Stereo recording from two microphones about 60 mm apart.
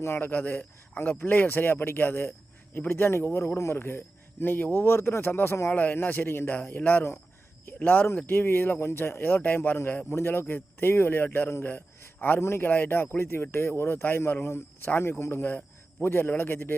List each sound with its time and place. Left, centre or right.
0.2 s a man's voice: left
3.8 s a man's voice: left